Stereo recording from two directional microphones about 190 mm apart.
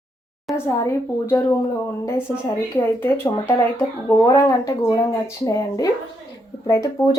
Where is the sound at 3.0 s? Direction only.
10° left (ahead or behind).